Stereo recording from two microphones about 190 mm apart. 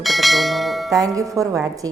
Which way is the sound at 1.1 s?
15° right (ahead or behind).